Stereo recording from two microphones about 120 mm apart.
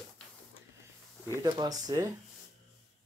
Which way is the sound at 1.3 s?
30° right (ahead or behind).